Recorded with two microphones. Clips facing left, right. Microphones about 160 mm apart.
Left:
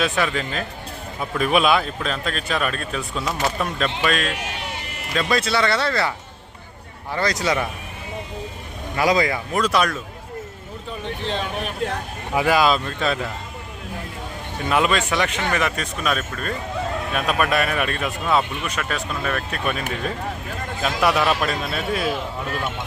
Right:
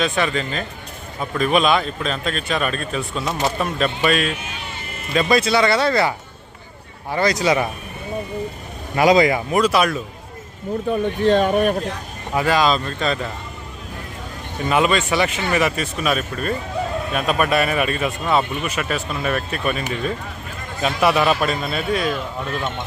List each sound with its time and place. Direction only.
0.0 s speech: centre (ahead or behind)
4.3 s sheep: 75° left (ahead or behind)
5.1 s speech: 15° right (ahead or behind)
7.2 s speech: 15° right (ahead or behind)
9.0 s speech: 20° right (ahead or behind)
10.8 s speech: 50° right (ahead or behind)
12.3 s speech: 5° left (ahead or behind)
14.7 s speech: centre (ahead or behind)
20.8 s speech: centre (ahead or behind)